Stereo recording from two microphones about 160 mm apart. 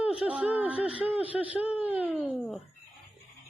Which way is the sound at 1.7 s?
10° right (ahead or behind).